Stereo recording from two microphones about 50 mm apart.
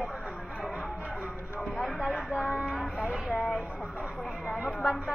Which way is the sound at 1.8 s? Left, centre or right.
Centre.